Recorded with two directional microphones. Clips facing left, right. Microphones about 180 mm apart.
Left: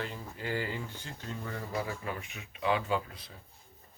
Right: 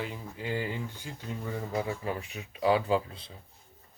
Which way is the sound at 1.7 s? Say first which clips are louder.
Right 4 dB; 25° right (ahead or behind).